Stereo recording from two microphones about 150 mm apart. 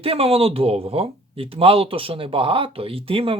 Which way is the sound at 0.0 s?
40° right (ahead or behind).